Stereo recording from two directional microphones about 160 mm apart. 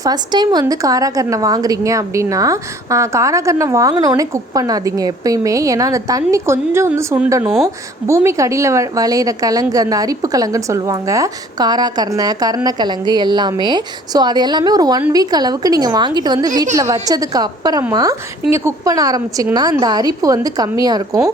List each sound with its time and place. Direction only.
0.0 s a woman's voice: 25° right (ahead or behind)
7.4 s speech: centre (ahead or behind)
8.0 s a woman's voice: 20° right (ahead or behind)